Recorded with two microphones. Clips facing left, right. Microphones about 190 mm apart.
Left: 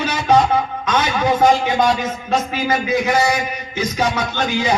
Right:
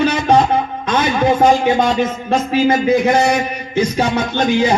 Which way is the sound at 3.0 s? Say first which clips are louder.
Right 4 dB; 30° right (ahead or behind).